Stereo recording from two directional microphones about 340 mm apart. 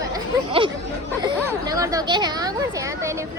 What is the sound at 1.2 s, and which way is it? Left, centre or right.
Speech, centre.